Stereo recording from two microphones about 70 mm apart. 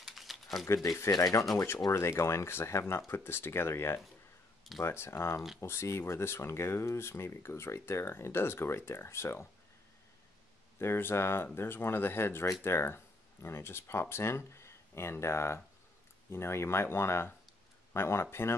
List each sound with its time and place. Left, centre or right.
0.0 s a sound: centre
1.1 s speech: left
1.5 s speech: left
10.8 s speech: left